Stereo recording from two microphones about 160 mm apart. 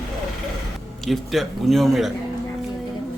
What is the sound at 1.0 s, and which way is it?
A man's voice, centre (ahead or behind).